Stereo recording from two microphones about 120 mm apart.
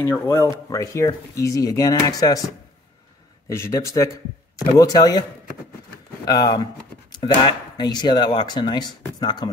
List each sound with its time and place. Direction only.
0.0 s speech: 25° left (ahead or behind)
6.2 s speech: 35° left (ahead or behind)